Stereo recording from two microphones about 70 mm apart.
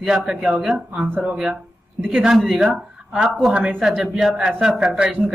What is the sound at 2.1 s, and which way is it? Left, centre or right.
A man's voice, centre.